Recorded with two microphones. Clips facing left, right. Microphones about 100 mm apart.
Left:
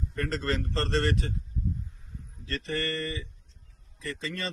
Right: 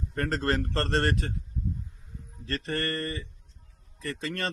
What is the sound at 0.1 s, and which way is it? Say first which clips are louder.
Speech: right 3 dB; 45° right (ahead or behind).